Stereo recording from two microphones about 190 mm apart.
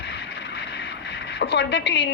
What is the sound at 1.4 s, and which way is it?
Speech, 65° left (ahead or behind).